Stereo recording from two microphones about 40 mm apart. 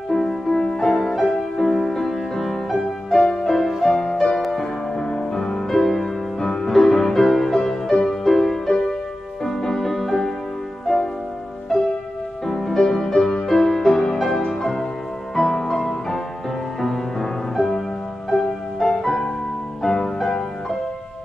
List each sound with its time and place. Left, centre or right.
0.1 s music: centre
0.9 s music: centre
3.9 s music: centre
11.7 s music: centre